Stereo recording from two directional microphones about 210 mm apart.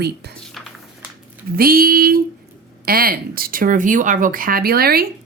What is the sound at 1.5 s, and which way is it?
A woman's voice, 45° right (ahead or behind).